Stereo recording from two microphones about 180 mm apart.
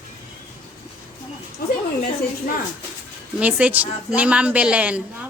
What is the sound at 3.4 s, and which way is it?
Speech, 10° right (ahead or behind).